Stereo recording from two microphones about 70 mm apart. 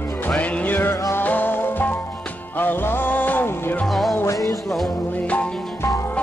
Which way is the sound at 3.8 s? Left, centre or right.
Centre.